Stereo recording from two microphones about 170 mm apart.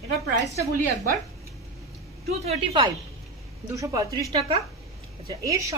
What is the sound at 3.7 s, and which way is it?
Speech, 20° right (ahead or behind).